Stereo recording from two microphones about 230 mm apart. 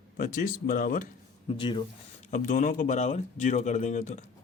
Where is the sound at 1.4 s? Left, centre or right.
Left.